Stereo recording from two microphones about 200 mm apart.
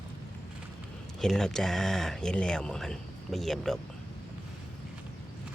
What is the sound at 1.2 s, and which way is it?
Speech, centre (ahead or behind).